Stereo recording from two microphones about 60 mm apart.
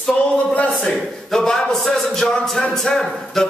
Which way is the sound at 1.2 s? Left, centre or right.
Centre.